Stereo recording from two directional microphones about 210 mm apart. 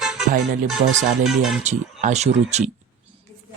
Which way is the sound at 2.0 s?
30° right (ahead or behind).